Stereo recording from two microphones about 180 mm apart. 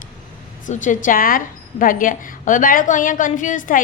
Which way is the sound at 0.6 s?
45° left (ahead or behind).